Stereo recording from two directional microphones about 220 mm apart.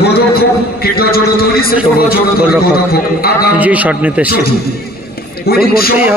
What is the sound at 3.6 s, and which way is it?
Speech, 5° right (ahead or behind).